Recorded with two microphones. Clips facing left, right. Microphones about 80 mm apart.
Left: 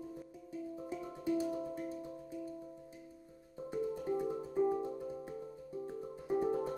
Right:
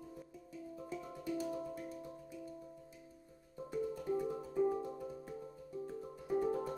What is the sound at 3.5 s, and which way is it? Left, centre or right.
Music, centre.